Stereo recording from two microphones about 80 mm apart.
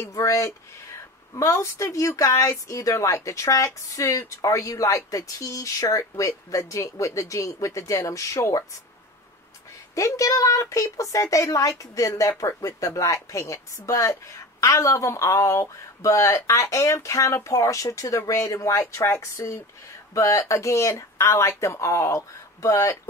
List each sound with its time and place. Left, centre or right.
0.1 s a woman's voice: left
9.9 s a woman's voice: left